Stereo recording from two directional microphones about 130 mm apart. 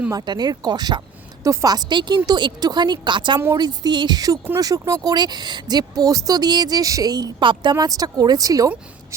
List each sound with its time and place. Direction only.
0.1 s a woman's voice: 30° right (ahead or behind)